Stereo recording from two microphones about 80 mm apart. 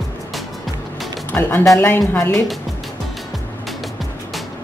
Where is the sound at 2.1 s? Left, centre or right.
Left.